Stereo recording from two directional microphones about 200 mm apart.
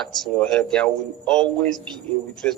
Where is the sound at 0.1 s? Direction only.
5° left (ahead or behind).